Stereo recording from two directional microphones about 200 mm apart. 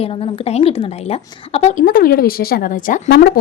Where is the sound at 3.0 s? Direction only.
55° left (ahead or behind).